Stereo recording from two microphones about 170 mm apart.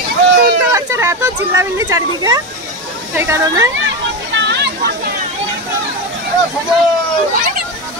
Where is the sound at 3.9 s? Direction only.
90° right.